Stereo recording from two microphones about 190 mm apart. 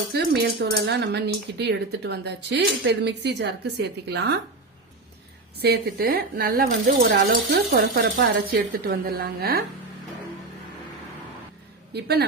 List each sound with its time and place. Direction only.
0.1 s speech: 60° right (ahead or behind)
5.5 s speech: 60° right (ahead or behind)
11.9 s speech: 55° right (ahead or behind)